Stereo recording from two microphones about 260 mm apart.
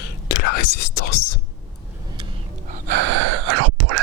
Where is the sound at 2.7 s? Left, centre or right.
Right.